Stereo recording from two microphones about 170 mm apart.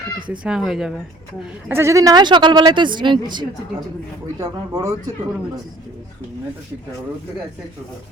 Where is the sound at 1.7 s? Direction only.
15° right (ahead or behind).